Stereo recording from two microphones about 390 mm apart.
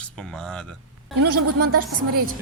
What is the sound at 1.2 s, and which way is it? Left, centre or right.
Speech, right.